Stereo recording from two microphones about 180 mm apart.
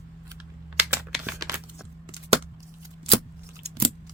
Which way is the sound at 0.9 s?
15° right (ahead or behind).